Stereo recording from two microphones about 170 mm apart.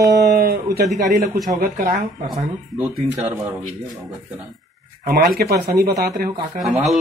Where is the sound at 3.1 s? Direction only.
10° right (ahead or behind).